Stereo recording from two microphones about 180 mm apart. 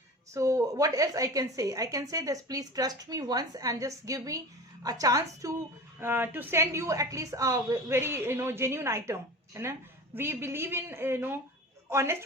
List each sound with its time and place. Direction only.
0.3 s a woman's voice: 15° right (ahead or behind)